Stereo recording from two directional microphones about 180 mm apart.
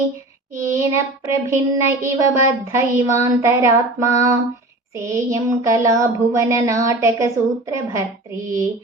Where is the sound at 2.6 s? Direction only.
15° right (ahead or behind).